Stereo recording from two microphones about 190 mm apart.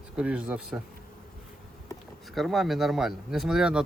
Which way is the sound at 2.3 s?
Centre (ahead or behind).